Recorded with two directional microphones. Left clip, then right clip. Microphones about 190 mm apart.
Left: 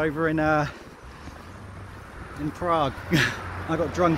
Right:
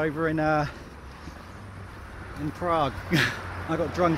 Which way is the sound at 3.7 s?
10° left (ahead or behind).